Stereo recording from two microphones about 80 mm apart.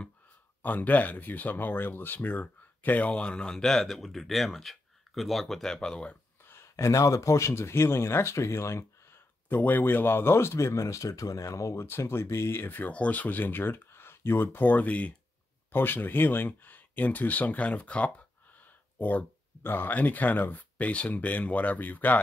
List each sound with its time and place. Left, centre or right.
0.6 s speech: left
6.5 s speech: left
9.5 s speech: left